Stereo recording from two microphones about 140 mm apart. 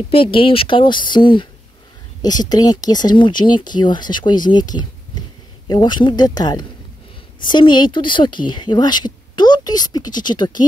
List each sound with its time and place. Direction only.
0.1 s a woman's voice: 40° left (ahead or behind)
2.5 s a woman's voice: 30° left (ahead or behind)